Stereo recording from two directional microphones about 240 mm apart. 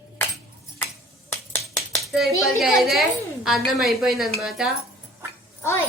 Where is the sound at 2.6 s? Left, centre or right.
Centre.